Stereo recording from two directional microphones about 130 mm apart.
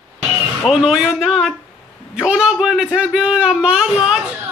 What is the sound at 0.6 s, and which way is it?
A man's voice, 5° right (ahead or behind).